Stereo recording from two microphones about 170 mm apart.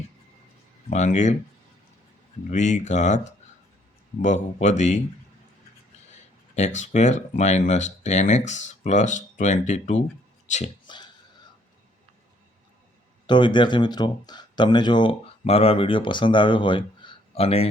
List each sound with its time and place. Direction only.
0.9 s speech: 45° left (ahead or behind)
2.5 s speech: 45° left (ahead or behind)
6.7 s speech: 45° left (ahead or behind)
10.8 s finger snapping: 25° left (ahead or behind)
13.2 s speech: 25° left (ahead or behind)